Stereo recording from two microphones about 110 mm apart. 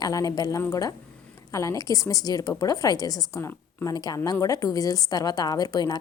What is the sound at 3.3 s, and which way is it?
Speech, 25° left (ahead or behind).